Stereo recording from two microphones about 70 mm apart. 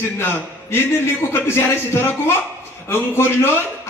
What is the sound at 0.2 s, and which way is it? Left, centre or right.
Speech, left.